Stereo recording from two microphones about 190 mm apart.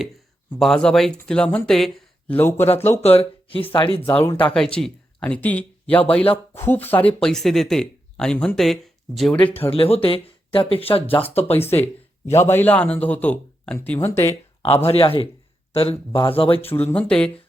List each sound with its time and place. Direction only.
0.6 s speech: 5° left (ahead or behind)
2.9 s speech: 30° left (ahead or behind)
4.1 s a man's voice: 10° left (ahead or behind)
9.6 s speech: 30° left (ahead or behind)
11.5 s a man's voice: 10° left (ahead or behind)
14.6 s speech: 30° left (ahead or behind)
16.6 s a man's voice: 10° left (ahead or behind)